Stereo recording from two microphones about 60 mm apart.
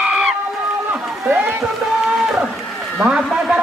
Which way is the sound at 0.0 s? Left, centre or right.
Centre.